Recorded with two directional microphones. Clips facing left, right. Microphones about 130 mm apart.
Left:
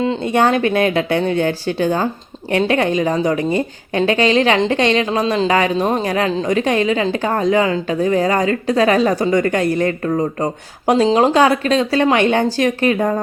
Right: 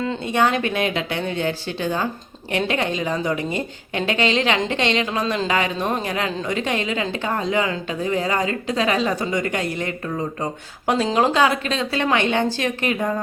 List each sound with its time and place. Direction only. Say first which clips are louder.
0.0 s speech: left 5 dB; 30° left (ahead or behind)
4.7 s a woman's voice: left 6 dB; 25° right (ahead or behind)
5.1 s a woman's voice: left 6 dB; 30° left (ahead or behind)